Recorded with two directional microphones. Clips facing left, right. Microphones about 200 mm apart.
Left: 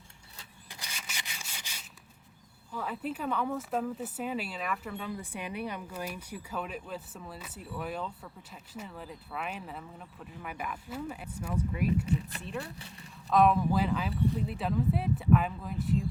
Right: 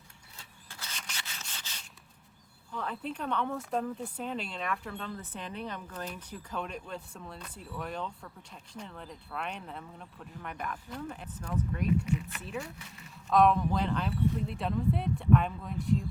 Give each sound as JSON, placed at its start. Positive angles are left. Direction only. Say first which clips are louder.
{"t": 0.7, "sound": "sanding", "louder": "even", "side_deg": 15}
{"t": 2.7, "sound": "speech", "louder": "left 1 dB", "side_deg": 5}
{"t": 12.0, "sound": "speech", "louder": "left 1 dB", "side_deg": 35}
{"t": 12.4, "sound": "speech", "louder": "even", "side_deg": 0}